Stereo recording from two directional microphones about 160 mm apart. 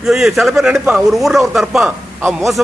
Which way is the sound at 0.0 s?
Centre (ahead or behind).